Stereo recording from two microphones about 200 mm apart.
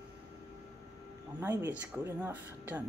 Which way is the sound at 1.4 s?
10° right (ahead or behind).